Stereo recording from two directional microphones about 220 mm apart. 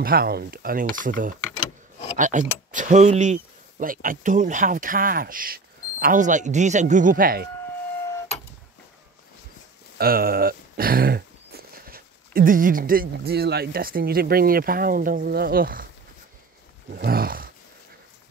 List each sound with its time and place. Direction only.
0.0 s speech: 45° right (ahead or behind)
9.9 s speech: 45° right (ahead or behind)
16.9 s speech: 40° right (ahead or behind)